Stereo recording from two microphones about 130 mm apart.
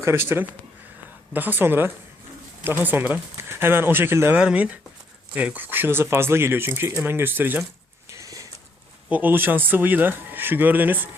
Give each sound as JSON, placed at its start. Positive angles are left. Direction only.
{"t": 0.0, "sound": "speech", "side_deg": -20}
{"t": 8.1, "sound": "a sound", "side_deg": -25}
{"t": 9.0, "sound": "speech", "side_deg": -10}